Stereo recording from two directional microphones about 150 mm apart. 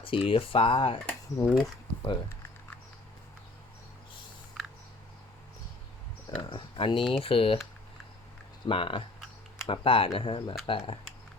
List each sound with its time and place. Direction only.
0.0 s speech: 35° left (ahead or behind)
1.0 s speech: 10° left (ahead or behind)
1.6 s a sound: 25° left (ahead or behind)
6.5 s speech: 35° left (ahead or behind)
8.6 s speech: 35° left (ahead or behind)